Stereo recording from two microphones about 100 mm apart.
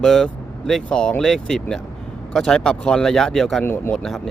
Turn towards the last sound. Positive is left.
turn(degrees=5)  # may be behind; listen again after turning